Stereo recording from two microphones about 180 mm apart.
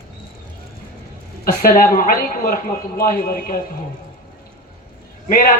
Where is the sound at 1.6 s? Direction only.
50° left (ahead or behind).